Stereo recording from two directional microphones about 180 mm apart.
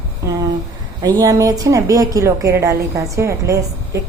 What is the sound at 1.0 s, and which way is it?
A woman's voice, 20° right (ahead or behind).